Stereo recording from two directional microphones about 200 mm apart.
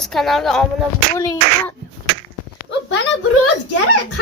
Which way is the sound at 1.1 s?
15° left (ahead or behind).